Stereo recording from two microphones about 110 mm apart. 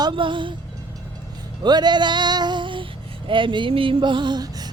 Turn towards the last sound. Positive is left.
turn(degrees=-35)  # may be behind; listen again after turning